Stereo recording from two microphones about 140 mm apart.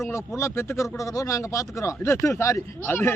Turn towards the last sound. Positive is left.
turn(degrees=15)  # may be behind; listen again after turning